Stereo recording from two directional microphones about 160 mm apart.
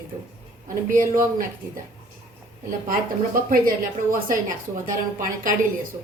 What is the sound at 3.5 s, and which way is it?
Speech, 60° right (ahead or behind).